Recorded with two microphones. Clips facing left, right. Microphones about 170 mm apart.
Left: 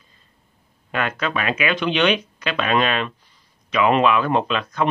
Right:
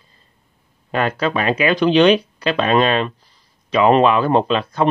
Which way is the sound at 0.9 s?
35° right (ahead or behind).